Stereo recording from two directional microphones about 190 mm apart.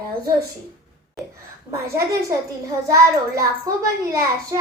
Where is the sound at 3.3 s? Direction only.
15° right (ahead or behind).